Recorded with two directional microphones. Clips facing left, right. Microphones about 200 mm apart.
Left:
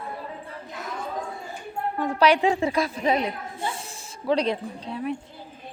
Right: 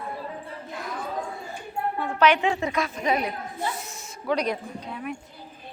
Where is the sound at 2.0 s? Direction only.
35° left (ahead or behind).